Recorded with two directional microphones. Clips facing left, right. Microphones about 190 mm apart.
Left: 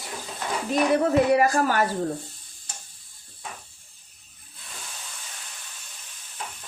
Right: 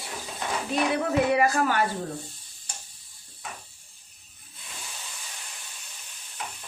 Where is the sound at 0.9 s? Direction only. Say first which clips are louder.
Left 5 dB; 40° left (ahead or behind).